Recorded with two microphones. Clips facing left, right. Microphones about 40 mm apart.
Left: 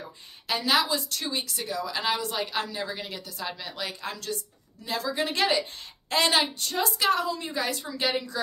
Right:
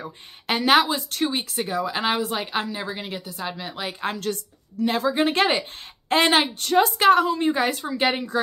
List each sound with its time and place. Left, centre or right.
0.5 s a woman's voice: right; by 3.9 s centre
4.0 s a woman's voice: right
4.9 s speech: right